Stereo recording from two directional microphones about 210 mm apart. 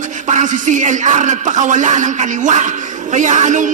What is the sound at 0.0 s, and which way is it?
Speech, 35° right (ahead or behind).